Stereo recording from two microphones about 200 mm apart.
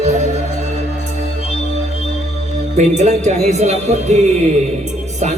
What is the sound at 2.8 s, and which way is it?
A man's voice, 35° right (ahead or behind).